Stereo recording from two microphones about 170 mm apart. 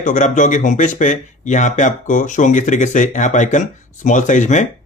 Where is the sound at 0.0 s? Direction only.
45° left (ahead or behind).